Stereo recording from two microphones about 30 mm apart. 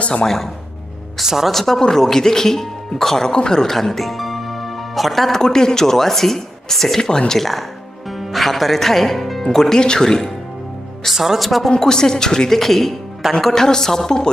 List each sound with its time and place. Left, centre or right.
1.2 s speech: centre
1.5 s speech: centre
1.8 s speech: left
3.6 s music: centre
5.3 s speech: centre
7.0 s speech: left
7.3 s speech: centre
9.8 s speech: left
11.3 s speech: centre
11.8 s speech: centre
12.5 s speech: centre
13.2 s speech: centre
13.6 s speech: centre